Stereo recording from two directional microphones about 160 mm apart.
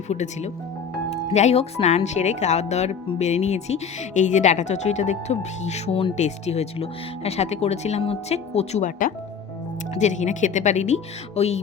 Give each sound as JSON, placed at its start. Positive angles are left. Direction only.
{"t": 0.1, "sound": "speech", "side_deg": 45}
{"t": 9.9, "sound": "speech", "side_deg": 50}